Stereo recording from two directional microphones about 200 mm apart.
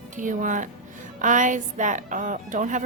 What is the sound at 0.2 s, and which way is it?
A woman's voice, 40° right (ahead or behind).